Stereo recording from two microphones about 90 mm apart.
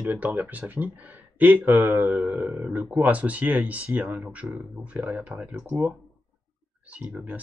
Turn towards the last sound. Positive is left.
turn(degrees=-15)  # may be behind; listen again after turning